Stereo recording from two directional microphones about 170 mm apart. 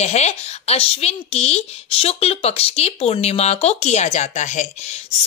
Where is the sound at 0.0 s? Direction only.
40° left (ahead or behind).